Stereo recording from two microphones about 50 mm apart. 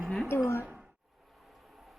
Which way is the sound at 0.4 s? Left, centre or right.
Left.